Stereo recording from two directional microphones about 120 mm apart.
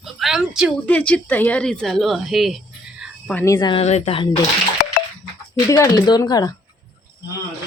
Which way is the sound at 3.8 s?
65° left (ahead or behind).